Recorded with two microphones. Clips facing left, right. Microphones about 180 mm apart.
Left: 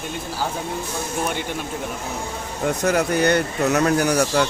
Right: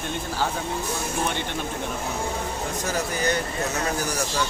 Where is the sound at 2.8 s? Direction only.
65° left (ahead or behind).